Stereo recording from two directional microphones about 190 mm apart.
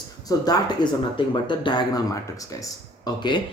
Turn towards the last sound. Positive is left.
turn(degrees=25)  # may be behind; listen again after turning